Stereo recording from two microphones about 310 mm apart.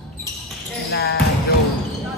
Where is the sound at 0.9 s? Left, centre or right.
Left.